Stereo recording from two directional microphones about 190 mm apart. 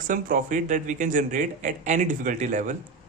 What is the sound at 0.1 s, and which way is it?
Speech, 45° right (ahead or behind).